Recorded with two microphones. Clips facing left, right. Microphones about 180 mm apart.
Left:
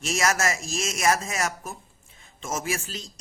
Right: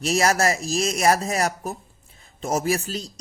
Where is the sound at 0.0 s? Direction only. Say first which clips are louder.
Right 5 dB; 35° right (ahead or behind).